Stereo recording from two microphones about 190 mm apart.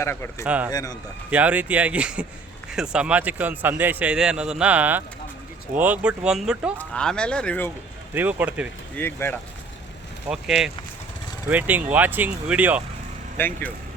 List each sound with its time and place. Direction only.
0.0 s speech: 15° left (ahead or behind)
0.4 s a man's voice: 5° right (ahead or behind)
0.7 s a man's voice: 20° left (ahead or behind)
1.3 s a man's voice: 5° right (ahead or behind)
8.1 s a man's voice: 10° right (ahead or behind)
9.0 s speech: 10° left (ahead or behind)
10.2 s a man's voice: 5° right (ahead or behind)
13.3 s speech: 10° left (ahead or behind)